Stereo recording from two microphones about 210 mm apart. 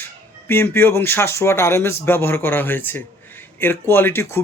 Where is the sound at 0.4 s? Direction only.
10° left (ahead or behind).